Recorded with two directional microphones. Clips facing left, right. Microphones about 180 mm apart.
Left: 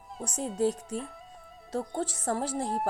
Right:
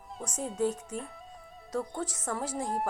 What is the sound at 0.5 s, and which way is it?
Speech, 35° left (ahead or behind).